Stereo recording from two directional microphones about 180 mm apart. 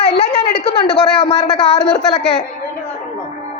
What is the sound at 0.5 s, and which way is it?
Speech, 65° left (ahead or behind).